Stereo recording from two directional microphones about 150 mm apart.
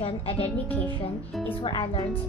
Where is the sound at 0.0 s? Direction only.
40° left (ahead or behind).